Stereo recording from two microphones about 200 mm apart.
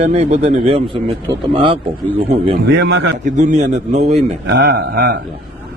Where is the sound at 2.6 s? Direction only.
65° right (ahead or behind).